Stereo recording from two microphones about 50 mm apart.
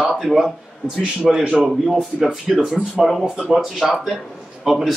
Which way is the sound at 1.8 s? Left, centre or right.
Centre.